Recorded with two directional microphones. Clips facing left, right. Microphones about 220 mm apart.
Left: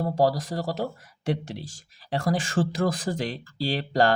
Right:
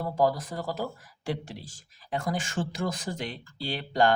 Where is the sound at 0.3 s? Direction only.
75° left (ahead or behind).